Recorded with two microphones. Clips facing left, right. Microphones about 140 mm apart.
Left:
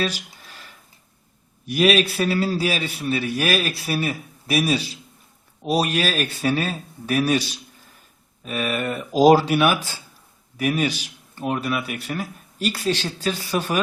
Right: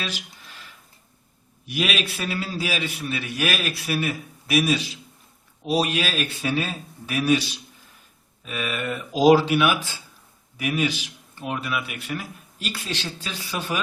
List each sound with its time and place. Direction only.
0.1 s speech: centre (ahead or behind)
0.4 s a sound: 40° left (ahead or behind)
1.6 s speech: 40° left (ahead or behind)
5.6 s speech: 45° left (ahead or behind)
8.4 s speech: 45° left (ahead or behind)